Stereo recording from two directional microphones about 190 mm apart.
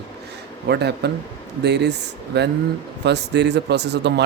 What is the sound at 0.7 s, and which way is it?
Speech, 60° right (ahead or behind).